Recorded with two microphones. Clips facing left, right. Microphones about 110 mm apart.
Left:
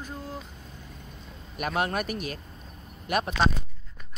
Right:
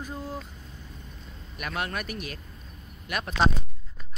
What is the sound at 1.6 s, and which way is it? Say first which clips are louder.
Speech: left 5 dB; 30° left (ahead or behind).